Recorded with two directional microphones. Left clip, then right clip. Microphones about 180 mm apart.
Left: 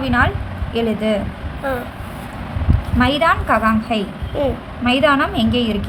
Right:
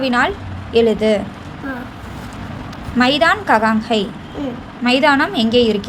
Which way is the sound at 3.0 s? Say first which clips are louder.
Right 2 dB; 25° right (ahead or behind).